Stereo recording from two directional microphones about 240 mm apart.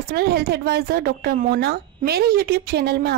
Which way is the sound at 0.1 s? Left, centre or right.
Right.